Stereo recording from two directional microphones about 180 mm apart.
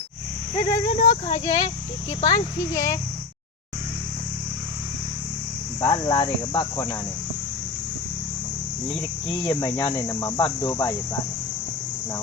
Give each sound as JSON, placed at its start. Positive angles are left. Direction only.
{"t": 0.9, "sound": "speech", "side_deg": 35}
{"t": 2.2, "sound": "cricket", "side_deg": 20}
{"t": 5.8, "sound": "cricket", "side_deg": 20}
{"t": 8.9, "sound": "cricket", "side_deg": 20}